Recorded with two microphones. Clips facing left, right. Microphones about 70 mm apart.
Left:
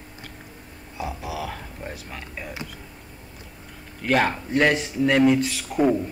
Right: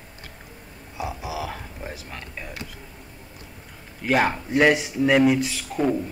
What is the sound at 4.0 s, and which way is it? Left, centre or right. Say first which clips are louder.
Speech: even; centre.